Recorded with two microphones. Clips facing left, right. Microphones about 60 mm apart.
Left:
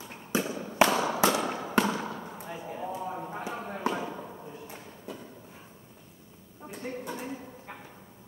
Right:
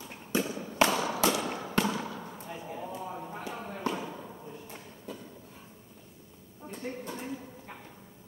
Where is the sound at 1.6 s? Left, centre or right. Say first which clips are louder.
Left 3 dB; left.